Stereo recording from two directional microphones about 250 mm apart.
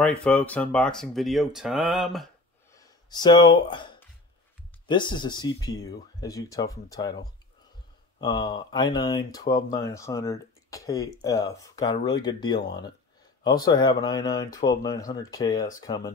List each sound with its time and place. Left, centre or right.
0.0 s speech: centre
2.7 s a sound: centre
4.8 s speech: centre